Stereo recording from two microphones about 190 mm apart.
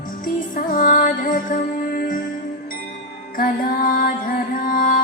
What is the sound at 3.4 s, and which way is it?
Music, 50° left (ahead or behind).